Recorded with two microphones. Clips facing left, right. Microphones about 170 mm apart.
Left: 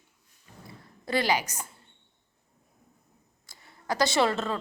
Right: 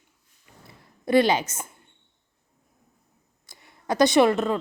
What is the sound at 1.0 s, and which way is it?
Speech, 20° right (ahead or behind).